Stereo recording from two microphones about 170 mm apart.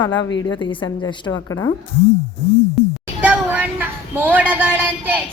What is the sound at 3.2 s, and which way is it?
Speech, 10° right (ahead or behind).